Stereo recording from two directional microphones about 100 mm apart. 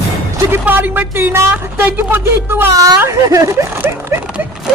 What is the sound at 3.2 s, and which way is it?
Speech, 35° right (ahead or behind).